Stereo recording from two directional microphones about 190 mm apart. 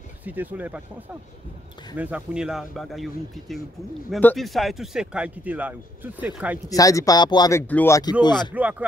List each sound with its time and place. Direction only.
0.2 s speech: 10° right (ahead or behind)
2.0 s a man's voice: 5° right (ahead or behind)
6.7 s speech: 20° left (ahead or behind)
8.4 s speech: 5° right (ahead or behind)